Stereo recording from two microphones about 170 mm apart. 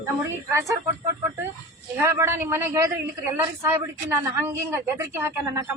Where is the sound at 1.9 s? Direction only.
15° right (ahead or behind).